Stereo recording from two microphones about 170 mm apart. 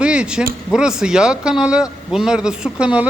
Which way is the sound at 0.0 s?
5° right (ahead or behind).